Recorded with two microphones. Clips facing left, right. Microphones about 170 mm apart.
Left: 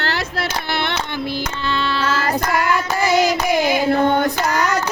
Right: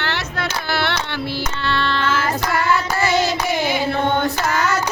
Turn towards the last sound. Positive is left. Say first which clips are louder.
# left 2 dB
turn(degrees=15)  # may be behind; listen again after turning